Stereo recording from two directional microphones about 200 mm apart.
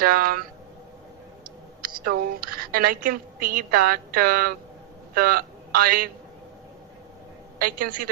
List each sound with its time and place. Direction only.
0.0 s a woman's voice: 50° right (ahead or behind)
1.8 s a woman's voice: 45° right (ahead or behind)
7.6 s a woman's voice: 40° right (ahead or behind)